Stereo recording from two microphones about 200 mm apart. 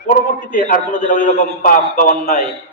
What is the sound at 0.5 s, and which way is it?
A man's voice, 45° left (ahead or behind).